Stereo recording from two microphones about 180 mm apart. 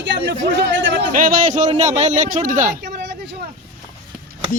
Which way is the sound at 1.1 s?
50° right (ahead or behind).